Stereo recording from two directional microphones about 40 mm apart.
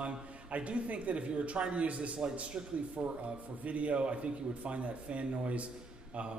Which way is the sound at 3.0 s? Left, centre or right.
Centre.